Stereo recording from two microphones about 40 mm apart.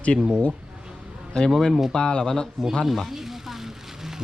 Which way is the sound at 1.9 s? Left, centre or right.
Left.